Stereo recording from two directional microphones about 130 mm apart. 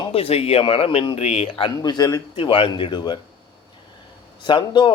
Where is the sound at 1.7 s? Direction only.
30° left (ahead or behind).